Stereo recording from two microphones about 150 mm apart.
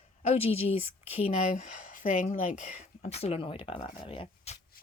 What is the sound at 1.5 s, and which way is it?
Speech, 60° left (ahead or behind).